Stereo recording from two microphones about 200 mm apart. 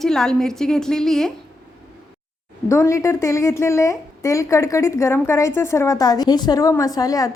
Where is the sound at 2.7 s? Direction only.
15° left (ahead or behind).